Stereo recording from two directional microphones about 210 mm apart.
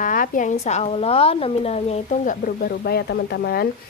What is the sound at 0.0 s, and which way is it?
A woman's voice, 40° left (ahead or behind).